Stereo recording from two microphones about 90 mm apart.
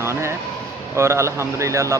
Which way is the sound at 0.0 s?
30° right (ahead or behind).